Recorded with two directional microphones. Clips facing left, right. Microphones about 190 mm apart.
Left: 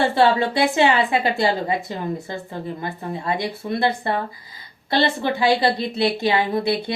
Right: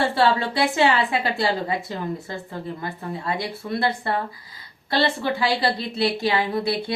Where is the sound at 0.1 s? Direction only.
20° left (ahead or behind).